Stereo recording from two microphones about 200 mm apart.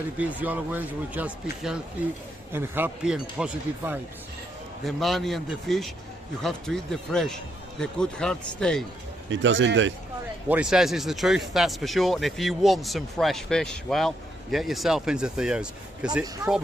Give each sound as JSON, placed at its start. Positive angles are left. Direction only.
{"t": 0.2, "sound": "speech", "side_deg": -10}
{"t": 9.3, "sound": "speech", "side_deg": -70}
{"t": 10.5, "sound": "speech", "side_deg": -5}